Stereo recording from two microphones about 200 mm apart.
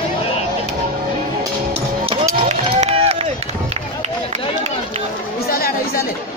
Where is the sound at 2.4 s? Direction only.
30° right (ahead or behind).